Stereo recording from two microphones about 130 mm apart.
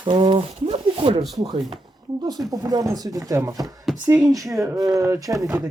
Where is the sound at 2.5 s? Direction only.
30° right (ahead or behind).